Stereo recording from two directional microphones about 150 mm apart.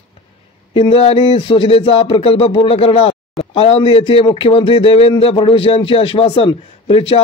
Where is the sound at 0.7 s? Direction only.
40° left (ahead or behind).